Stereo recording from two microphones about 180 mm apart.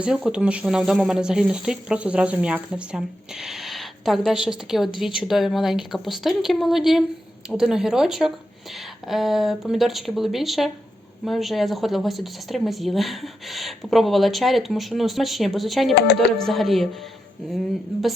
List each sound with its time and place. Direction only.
0.0 s speech: 5° right (ahead or behind)